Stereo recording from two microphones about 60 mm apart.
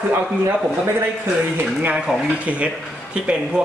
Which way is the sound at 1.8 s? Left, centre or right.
Right.